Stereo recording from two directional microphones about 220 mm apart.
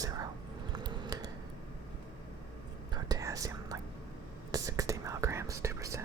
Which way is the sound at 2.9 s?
15° right (ahead or behind).